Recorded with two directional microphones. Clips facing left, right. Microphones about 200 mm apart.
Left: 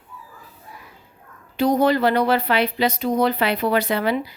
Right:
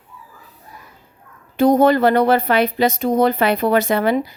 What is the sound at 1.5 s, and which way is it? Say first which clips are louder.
Speech: right 5 dB; 50° right (ahead or behind).